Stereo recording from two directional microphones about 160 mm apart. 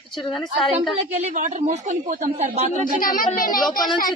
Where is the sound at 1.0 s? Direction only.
45° right (ahead or behind).